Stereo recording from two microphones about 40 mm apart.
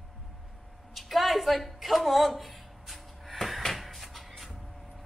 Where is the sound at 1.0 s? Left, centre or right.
Centre.